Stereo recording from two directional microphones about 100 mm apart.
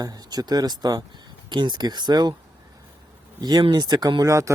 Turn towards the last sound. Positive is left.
turn(degrees=-30)  # may be behind; listen again after turning